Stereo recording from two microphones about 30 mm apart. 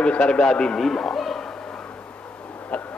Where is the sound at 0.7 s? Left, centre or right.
Centre.